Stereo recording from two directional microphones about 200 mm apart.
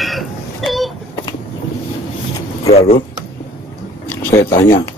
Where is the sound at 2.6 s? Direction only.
30° left (ahead or behind).